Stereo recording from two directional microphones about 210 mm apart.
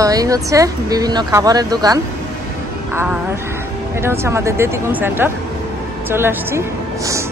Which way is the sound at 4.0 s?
10° right (ahead or behind).